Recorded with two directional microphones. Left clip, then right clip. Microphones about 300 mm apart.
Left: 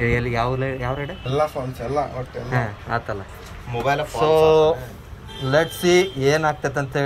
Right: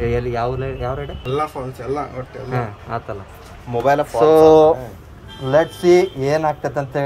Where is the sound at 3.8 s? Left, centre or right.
Right.